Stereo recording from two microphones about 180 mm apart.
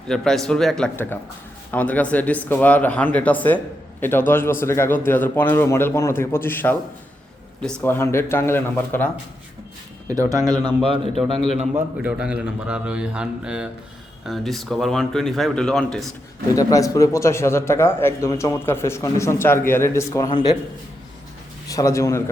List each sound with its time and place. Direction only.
0.1 s speech: 5° left (ahead or behind)
10.3 s speech: 25° right (ahead or behind)
11.7 s speech: 5° right (ahead or behind)
16.6 s speech: 20° left (ahead or behind)
21.7 s speech: 15° left (ahead or behind)